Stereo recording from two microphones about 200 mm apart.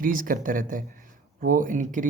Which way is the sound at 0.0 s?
45° right (ahead or behind).